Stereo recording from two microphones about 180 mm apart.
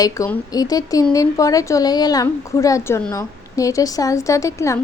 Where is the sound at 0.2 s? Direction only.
15° left (ahead or behind).